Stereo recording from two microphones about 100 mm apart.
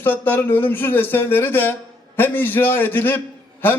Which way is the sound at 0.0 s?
20° left (ahead or behind).